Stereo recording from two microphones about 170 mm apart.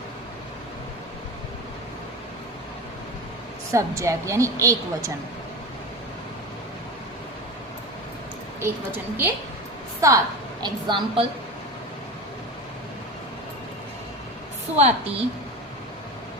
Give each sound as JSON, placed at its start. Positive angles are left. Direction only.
{"t": 3.7, "sound": "a woman's voice", "side_deg": -15}
{"t": 8.6, "sound": "a woman's voice", "side_deg": -10}
{"t": 14.8, "sound": "a woman's voice", "side_deg": -35}